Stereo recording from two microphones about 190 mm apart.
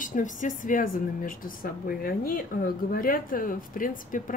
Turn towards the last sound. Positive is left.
turn(degrees=45)  # may be behind; listen again after turning